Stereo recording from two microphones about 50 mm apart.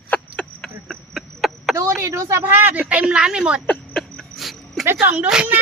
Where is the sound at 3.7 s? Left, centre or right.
Centre.